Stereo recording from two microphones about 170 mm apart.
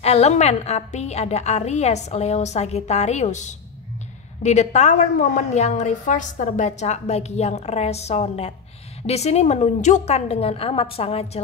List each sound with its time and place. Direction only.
0.0 s a woman's voice: 40° left (ahead or behind)